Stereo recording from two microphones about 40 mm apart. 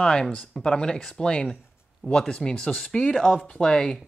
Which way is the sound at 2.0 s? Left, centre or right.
Left.